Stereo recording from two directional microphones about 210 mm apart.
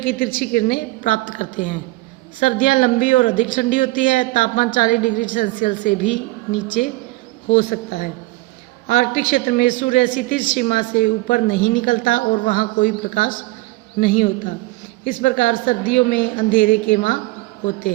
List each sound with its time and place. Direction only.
0.0 s speech: 40° left (ahead or behind)